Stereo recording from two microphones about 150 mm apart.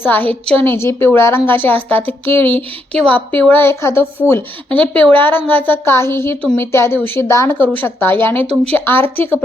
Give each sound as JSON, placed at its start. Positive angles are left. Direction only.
{"t": 0.0, "sound": "a woman's voice", "side_deg": 10}